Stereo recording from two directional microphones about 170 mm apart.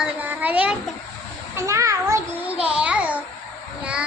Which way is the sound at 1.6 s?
20° right (ahead or behind).